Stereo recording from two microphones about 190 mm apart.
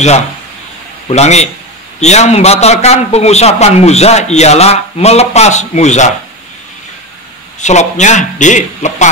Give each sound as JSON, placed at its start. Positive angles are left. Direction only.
{"t": 1.0, "sound": "a man's voice", "side_deg": 35}
{"t": 7.6, "sound": "a man's voice", "side_deg": 40}